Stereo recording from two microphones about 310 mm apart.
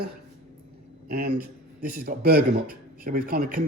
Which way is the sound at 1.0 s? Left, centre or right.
Right.